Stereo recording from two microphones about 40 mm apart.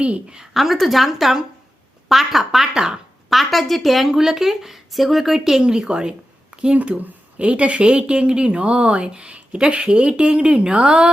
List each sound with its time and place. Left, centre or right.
0.5 s speech: centre
2.7 s speech: centre
3.2 s a woman's voice: centre
5.6 s speech: right
6.7 s speech: right